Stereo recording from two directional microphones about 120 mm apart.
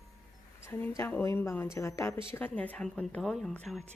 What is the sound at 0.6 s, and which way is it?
A woman's voice, 20° left (ahead or behind).